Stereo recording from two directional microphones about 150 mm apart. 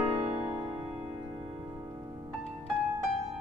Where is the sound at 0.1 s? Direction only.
40° right (ahead or behind).